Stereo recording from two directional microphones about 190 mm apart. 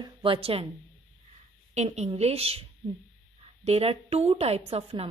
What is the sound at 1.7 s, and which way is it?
A woman's voice, 35° right (ahead or behind).